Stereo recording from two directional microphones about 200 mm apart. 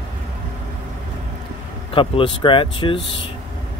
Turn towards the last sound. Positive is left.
turn(degrees=25)  # may be behind; listen again after turning